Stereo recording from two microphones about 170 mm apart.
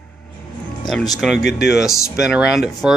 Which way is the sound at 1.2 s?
Centre (ahead or behind).